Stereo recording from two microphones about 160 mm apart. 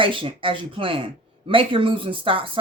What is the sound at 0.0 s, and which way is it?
A woman's voice, 35° right (ahead or behind).